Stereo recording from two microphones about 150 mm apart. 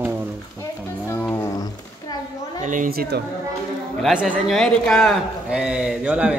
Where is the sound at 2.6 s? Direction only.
60° right (ahead or behind); by 3.2 s 90° right.